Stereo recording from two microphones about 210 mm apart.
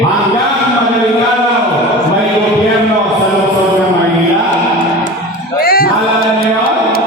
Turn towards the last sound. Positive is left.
turn(degrees=45)  # may be behind; listen again after turning